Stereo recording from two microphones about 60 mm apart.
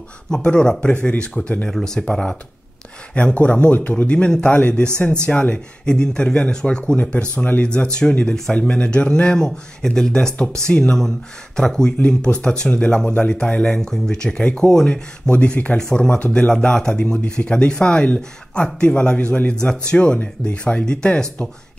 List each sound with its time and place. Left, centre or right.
0.3 s speech: centre
16.5 s speech: centre